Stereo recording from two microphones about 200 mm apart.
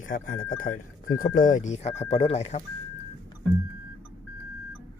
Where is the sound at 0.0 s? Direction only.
40° left (ahead or behind).